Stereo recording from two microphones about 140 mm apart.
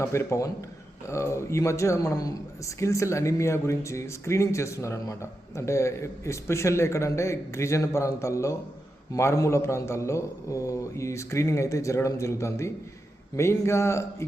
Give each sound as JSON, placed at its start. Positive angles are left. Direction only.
{"t": 0.0, "sound": "speech", "side_deg": 20}